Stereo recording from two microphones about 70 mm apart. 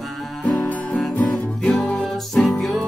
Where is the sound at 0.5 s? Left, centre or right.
Centre.